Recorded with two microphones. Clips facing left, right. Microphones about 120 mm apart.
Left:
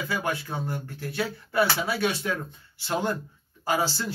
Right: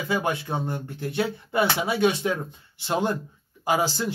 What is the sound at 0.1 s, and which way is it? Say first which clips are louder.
Speech: right 5 dB; 20° right (ahead or behind).